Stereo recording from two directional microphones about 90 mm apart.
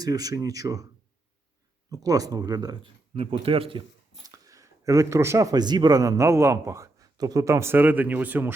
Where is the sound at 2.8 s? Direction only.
85° right.